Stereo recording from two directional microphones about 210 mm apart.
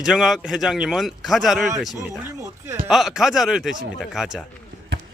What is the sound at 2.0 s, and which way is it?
Speech, 15° right (ahead or behind).